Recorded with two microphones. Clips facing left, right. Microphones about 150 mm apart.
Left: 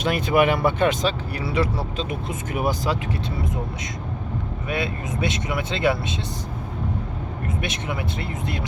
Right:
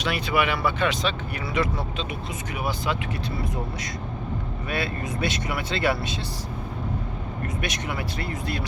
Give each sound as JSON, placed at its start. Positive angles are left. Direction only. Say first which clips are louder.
{"t": 0.0, "sound": "speech", "louder": "left 5 dB", "side_deg": 45}
{"t": 1.5, "sound": "speech", "louder": "left 2 dB", "side_deg": 30}
{"t": 2.0, "sound": "speech", "louder": "left 4 dB", "side_deg": 45}
{"t": 4.7, "sound": "speech", "louder": "left 2 dB", "side_deg": 20}
{"t": 7.4, "sound": "speech", "louder": "left 2 dB", "side_deg": 25}